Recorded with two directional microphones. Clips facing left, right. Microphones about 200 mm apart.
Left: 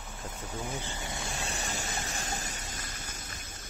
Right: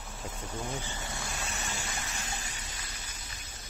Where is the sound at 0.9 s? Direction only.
15° left (ahead or behind).